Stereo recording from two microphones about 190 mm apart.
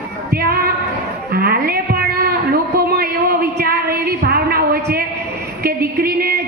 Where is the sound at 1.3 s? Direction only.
55° right (ahead or behind).